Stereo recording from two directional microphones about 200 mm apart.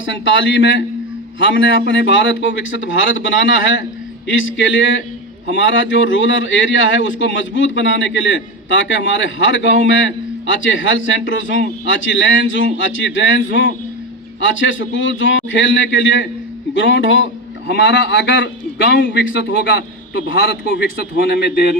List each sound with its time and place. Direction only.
0.0 s speech: 70° left (ahead or behind)